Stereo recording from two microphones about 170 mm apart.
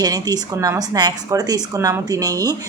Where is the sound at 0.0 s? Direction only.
25° right (ahead or behind).